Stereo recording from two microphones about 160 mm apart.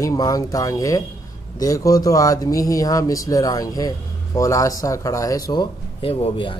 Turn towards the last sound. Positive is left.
turn(degrees=35)  # may be behind; listen again after turning